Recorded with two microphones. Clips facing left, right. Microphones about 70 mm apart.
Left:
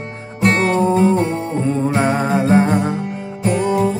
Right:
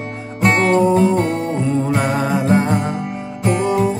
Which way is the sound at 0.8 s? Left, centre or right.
Left.